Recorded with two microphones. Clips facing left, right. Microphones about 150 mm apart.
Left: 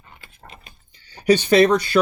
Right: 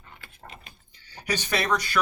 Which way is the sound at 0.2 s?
25° left (ahead or behind).